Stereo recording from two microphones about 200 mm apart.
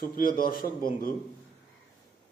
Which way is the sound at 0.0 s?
45° left (ahead or behind).